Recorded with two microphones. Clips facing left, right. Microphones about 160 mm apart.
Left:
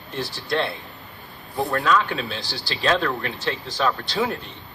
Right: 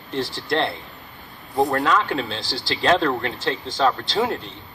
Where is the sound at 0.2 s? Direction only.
25° right (ahead or behind).